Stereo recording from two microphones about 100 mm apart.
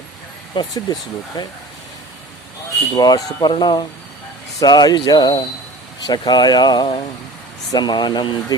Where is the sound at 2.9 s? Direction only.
40° left (ahead or behind).